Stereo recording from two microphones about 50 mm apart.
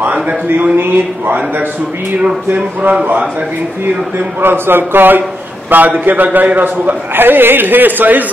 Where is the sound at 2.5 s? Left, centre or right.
Right.